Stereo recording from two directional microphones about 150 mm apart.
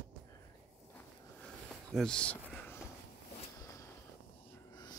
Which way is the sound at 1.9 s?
5° left (ahead or behind).